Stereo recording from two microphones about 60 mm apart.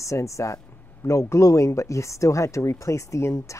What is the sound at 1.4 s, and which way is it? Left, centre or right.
Speech, left.